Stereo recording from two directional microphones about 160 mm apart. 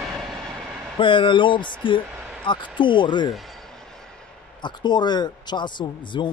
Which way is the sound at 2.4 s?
30° left (ahead or behind).